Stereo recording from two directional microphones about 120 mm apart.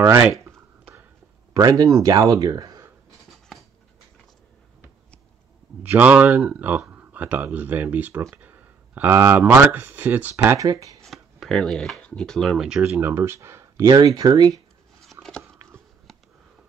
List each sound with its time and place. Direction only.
0.0 s speech: 25° right (ahead or behind)
5.8 s a man's voice: 15° right (ahead or behind)
11.1 s speech: centre (ahead or behind)
12.8 s speech: 20° right (ahead or behind)
15.0 s biting: centre (ahead or behind)
15.4 s dog: 20° right (ahead or behind)